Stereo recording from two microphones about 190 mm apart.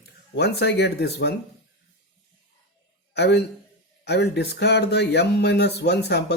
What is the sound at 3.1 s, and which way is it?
Speech, 65° left (ahead or behind).